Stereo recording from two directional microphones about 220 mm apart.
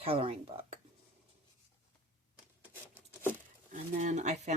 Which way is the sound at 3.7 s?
30° right (ahead or behind).